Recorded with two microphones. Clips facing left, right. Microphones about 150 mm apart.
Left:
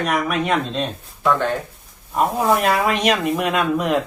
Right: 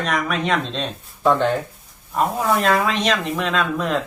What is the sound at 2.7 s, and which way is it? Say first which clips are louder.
Speech: left 1 dB; 10° left (ahead or behind).